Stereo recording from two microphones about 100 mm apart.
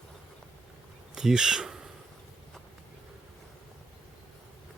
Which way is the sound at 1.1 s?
5° right (ahead or behind).